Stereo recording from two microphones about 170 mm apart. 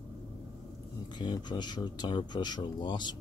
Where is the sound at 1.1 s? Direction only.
25° left (ahead or behind).